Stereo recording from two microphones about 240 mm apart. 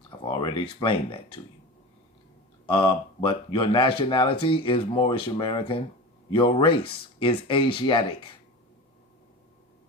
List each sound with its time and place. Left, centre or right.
0.3 s speech: centre
2.6 s speech: left